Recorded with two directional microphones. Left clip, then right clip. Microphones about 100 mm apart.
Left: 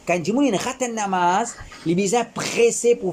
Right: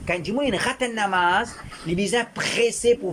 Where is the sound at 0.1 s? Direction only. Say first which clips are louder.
Left 4 dB; 40° left (ahead or behind).